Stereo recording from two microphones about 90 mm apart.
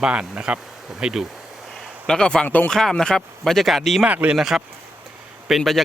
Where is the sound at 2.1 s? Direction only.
10° left (ahead or behind).